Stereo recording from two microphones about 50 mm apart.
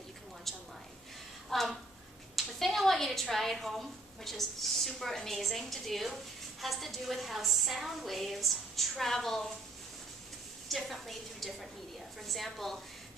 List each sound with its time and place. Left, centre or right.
0.5 s a sound: centre
1.5 s a woman's voice: centre
10.7 s a woman's voice: centre